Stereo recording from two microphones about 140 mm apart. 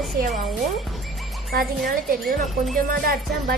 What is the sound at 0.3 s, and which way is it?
Speech, centre (ahead or behind).